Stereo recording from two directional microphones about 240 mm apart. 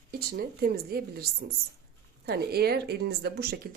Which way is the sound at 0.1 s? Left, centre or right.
Right.